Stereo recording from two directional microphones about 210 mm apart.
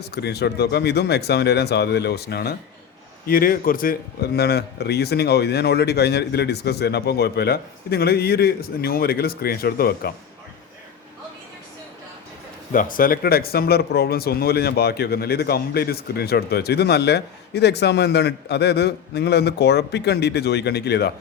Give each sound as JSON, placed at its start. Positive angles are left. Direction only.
{"t": 0.0, "sound": "speech", "side_deg": 50}
{"t": 12.7, "sound": "speech", "side_deg": 40}